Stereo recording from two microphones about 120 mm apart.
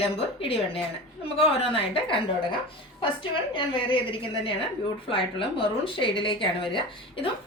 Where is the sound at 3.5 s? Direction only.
45° left (ahead or behind).